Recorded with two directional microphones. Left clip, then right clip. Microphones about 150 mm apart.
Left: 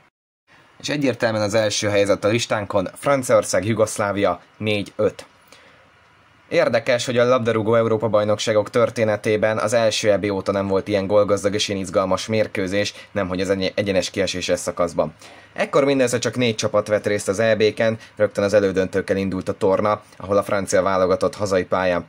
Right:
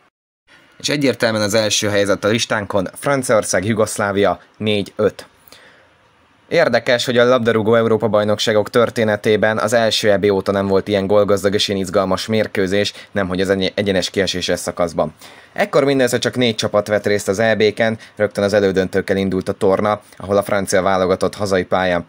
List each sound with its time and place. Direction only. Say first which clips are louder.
0.8 s speech: right 4 dB; 25° right (ahead or behind)
6.5 s speech: right 4 dB; 35° right (ahead or behind)